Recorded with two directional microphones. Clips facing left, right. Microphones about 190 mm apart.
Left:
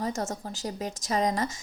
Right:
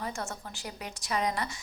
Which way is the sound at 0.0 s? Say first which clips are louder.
Left 6 dB; 40° left (ahead or behind).